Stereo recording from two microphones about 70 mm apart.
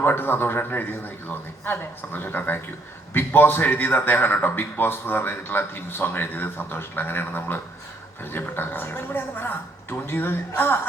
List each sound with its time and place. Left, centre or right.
0.0 s a man's voice: left